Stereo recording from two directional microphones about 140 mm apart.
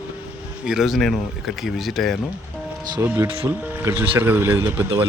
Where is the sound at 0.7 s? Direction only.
5° right (ahead or behind).